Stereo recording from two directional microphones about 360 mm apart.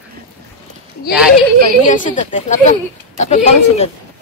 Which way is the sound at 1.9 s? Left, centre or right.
Left.